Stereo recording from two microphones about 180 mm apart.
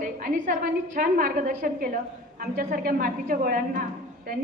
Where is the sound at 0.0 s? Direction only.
45° right (ahead or behind).